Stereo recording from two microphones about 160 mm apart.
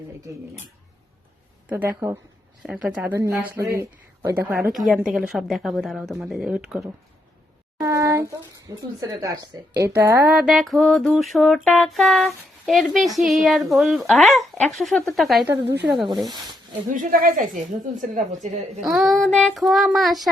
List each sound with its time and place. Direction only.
0.3 s speech: 20° right (ahead or behind)
1.7 s speech: 10° right (ahead or behind)
5.0 s music: 5° right (ahead or behind)
7.8 s speech: 20° right (ahead or behind)
10.3 s music: centre (ahead or behind)
16.9 s a woman's voice: 60° right (ahead or behind)
18.8 s music: centre (ahead or behind)